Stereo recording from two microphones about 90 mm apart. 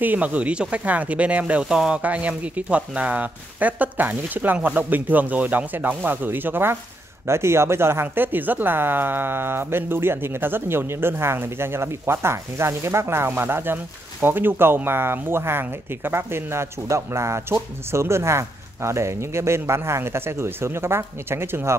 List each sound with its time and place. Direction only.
0.0 s speech: 20° right (ahead or behind)